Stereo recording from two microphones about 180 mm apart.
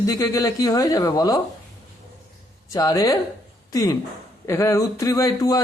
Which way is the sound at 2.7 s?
20° left (ahead or behind).